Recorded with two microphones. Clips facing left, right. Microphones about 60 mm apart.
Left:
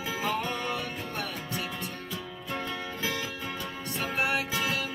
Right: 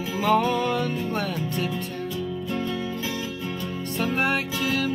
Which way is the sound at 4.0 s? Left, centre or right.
Right.